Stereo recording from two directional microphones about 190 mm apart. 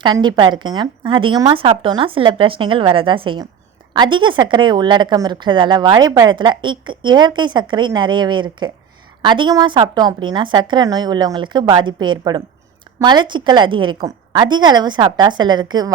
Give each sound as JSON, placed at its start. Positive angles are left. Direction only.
{"t": 0.0, "sound": "a woman's voice", "side_deg": -25}